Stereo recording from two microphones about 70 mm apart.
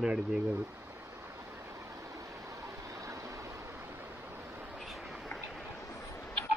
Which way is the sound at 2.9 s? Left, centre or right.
Right.